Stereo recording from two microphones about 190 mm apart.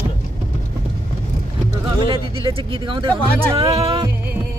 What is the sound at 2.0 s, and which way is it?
Speech, 30° right (ahead or behind).